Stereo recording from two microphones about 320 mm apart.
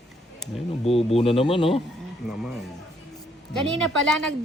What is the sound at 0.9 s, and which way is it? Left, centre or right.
Speech, centre.